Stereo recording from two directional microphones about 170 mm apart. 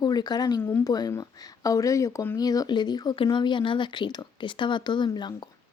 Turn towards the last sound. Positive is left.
turn(degrees=25)  # may be behind; listen again after turning